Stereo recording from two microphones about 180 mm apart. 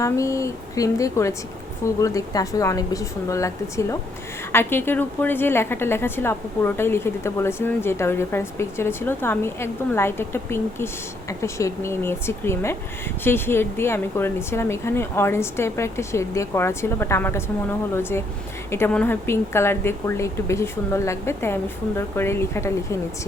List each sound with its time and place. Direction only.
0.0 s a woman's voice: 15° left (ahead or behind)
18.7 s a woman's voice: 10° left (ahead or behind)